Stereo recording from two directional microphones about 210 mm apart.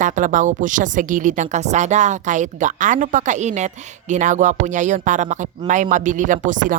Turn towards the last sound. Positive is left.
turn(degrees=-40)  # may be behind; listen again after turning